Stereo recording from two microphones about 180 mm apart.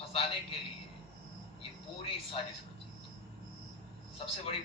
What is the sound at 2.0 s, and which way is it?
Speech, 30° left (ahead or behind).